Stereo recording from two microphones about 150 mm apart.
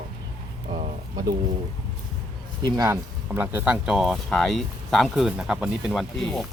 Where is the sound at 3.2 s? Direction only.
15° right (ahead or behind); by 6.5 s 5° left (ahead or behind).